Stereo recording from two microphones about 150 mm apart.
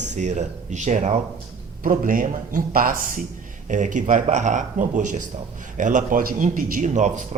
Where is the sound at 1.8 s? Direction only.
65° right (ahead or behind).